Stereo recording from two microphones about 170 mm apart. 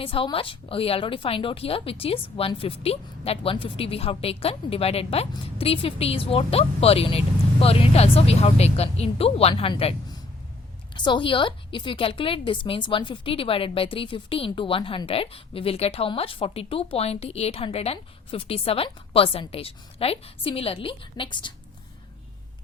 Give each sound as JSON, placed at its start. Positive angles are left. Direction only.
{"t": 0.0, "sound": "a woman's voice", "side_deg": 30}